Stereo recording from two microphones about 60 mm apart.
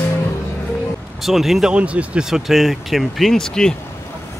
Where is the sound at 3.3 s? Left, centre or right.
Centre.